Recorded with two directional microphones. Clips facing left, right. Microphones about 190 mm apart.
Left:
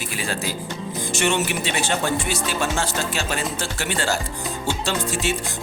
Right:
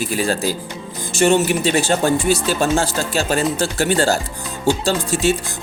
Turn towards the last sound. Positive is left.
turn(degrees=-35)  # may be behind; listen again after turning